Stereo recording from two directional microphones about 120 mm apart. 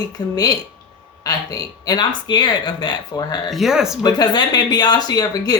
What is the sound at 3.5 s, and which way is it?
Speech, 5° right (ahead or behind).